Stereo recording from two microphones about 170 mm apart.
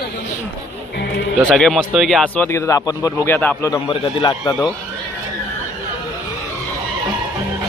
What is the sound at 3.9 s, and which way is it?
Speech, 30° left (ahead or behind).